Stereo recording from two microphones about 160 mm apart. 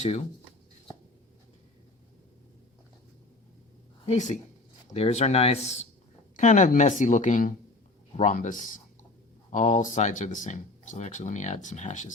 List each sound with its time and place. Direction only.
4.0 s speech: 45° left (ahead or behind)